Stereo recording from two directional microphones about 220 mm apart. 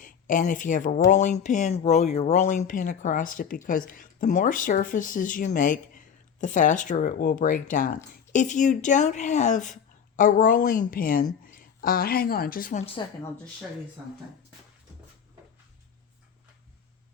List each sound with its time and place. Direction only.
0.0 s speech: 35° left (ahead or behind)